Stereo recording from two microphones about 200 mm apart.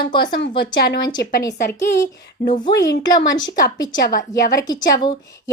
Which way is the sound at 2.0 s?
40° left (ahead or behind).